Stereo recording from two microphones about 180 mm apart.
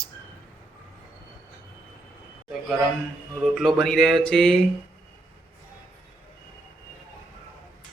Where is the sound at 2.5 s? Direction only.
Centre (ahead or behind).